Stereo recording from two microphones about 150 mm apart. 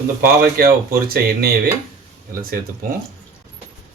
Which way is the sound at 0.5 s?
85° right.